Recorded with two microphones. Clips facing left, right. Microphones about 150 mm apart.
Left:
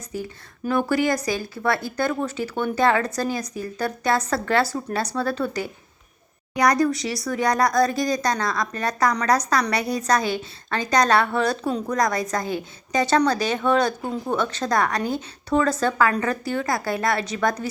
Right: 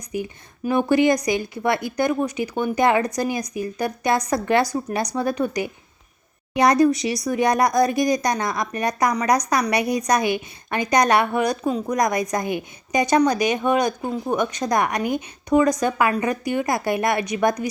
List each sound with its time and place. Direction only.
0.1 s speech: 15° right (ahead or behind)